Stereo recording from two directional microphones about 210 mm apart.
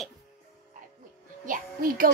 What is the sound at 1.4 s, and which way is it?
Speech, 40° right (ahead or behind).